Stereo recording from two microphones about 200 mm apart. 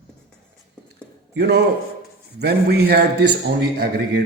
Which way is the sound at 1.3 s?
55° right (ahead or behind).